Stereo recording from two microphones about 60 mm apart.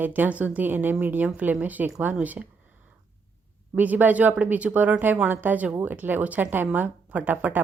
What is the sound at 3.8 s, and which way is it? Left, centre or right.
A woman's voice, right.